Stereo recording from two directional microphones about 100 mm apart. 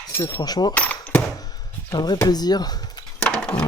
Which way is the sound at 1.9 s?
45° left (ahead or behind).